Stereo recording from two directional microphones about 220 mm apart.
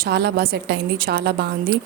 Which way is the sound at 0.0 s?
50° right (ahead or behind).